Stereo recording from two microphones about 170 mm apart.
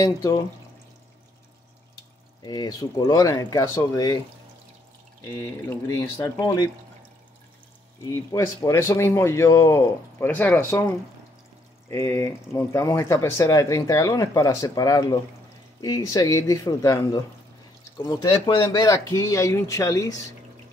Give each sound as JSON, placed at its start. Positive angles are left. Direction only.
{"t": 0.0, "sound": "speech", "side_deg": 20}
{"t": 2.4, "sound": "speech", "side_deg": 25}
{"t": 5.4, "sound": "speech", "side_deg": 15}
{"t": 8.0, "sound": "speech", "side_deg": 20}